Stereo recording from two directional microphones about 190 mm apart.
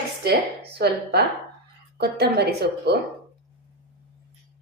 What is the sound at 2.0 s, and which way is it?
Speech, 55° right (ahead or behind).